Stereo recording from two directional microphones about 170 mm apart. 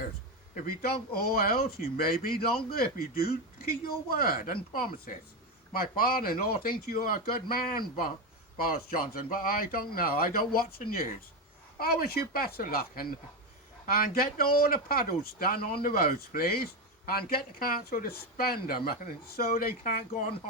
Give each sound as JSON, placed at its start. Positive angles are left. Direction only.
{"t": 0.5, "sound": "speech", "side_deg": 60}